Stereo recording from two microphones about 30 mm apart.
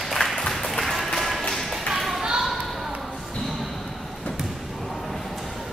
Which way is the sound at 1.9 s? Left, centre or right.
Centre.